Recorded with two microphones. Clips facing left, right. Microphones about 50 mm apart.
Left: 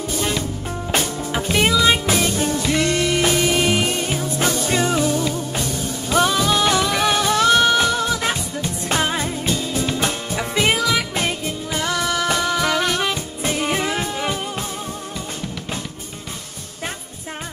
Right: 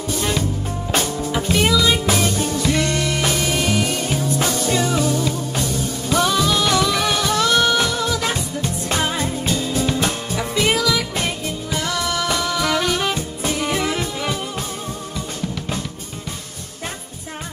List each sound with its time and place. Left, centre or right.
0.9 s music: left
5.2 s music: left